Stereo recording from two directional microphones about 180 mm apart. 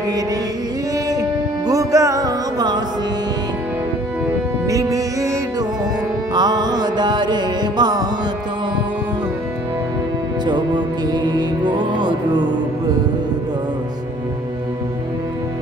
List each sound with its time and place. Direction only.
1.7 s music: 20° right (ahead or behind)
4.6 s music: 20° right (ahead or behind)
6.3 s music: 25° right (ahead or behind)
10.4 s music: 25° right (ahead or behind)